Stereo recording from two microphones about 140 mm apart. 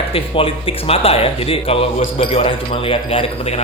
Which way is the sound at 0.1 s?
40° left (ahead or behind).